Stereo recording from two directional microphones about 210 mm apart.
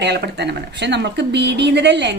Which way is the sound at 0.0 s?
55° right (ahead or behind).